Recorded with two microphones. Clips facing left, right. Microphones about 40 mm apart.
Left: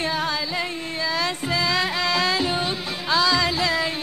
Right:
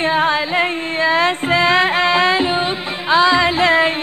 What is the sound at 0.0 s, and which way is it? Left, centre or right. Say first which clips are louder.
Music: right 9 dB; right.